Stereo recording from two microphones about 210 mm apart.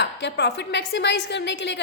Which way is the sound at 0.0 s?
55° left (ahead or behind).